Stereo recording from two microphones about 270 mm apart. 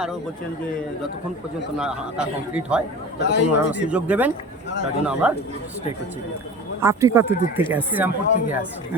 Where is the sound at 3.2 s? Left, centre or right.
Left.